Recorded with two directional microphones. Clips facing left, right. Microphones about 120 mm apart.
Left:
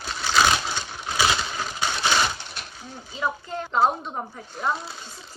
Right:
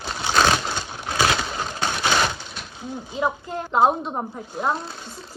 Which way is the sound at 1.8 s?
20° right (ahead or behind).